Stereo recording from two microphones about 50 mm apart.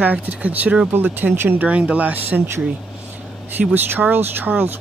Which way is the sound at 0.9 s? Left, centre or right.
Right.